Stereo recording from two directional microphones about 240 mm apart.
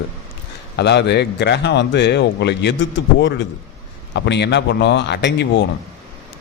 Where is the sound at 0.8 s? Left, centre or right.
Left.